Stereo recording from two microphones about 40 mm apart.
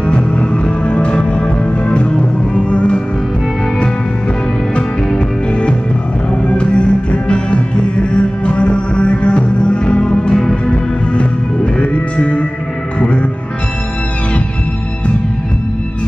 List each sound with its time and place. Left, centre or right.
0.0 s music: left
6.4 s music: left